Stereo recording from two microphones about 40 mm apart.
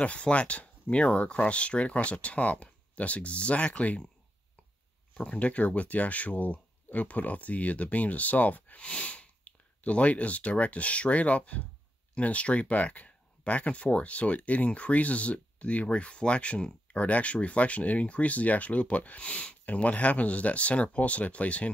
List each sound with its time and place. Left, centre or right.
0.0 s speech: left
5.1 s speech: left
8.7 s speech: left